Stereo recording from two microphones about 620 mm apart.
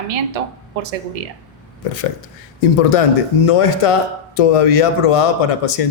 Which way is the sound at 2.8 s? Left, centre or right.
Left.